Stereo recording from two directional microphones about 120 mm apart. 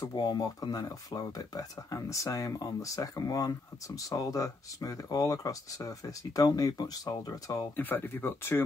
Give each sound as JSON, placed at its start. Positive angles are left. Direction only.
{"t": 0.1, "sound": "speech", "side_deg": 35}
{"t": 7.7, "sound": "speech", "side_deg": 15}